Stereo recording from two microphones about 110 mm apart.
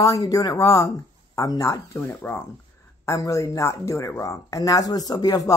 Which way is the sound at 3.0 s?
30° left (ahead or behind).